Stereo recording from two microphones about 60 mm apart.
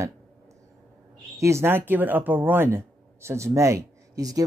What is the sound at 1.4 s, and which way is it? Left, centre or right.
Speech, right.